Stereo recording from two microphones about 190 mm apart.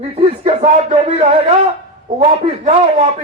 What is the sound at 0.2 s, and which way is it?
Speech, 30° right (ahead or behind).